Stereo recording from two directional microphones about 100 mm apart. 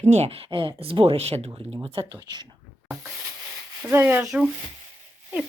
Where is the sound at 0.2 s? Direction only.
75° right (ahead or behind).